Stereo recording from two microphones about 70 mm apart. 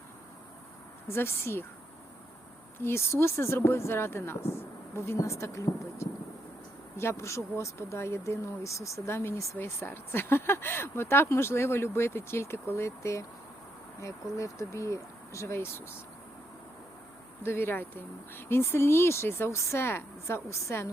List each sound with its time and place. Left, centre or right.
1.0 s speech: left
2.7 s speech: left
17.4 s speech: left